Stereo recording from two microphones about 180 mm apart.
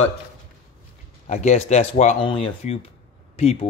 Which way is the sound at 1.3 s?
40° left (ahead or behind).